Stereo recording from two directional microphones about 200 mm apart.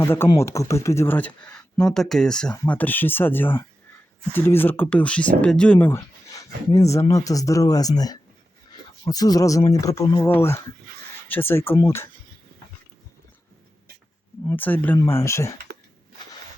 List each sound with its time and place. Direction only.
0.0 s speech: 10° left (ahead or behind)
14.4 s speech: 10° left (ahead or behind)